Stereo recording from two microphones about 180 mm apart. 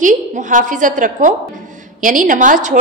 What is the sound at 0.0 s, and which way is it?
A woman's voice, 45° right (ahead or behind).